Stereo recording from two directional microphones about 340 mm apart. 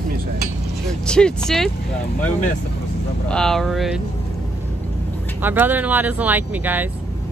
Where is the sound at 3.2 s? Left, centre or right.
Centre.